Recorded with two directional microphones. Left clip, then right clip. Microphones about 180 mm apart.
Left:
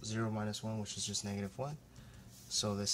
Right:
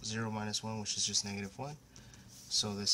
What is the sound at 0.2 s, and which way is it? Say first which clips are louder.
Speech: even; 20° left (ahead or behind).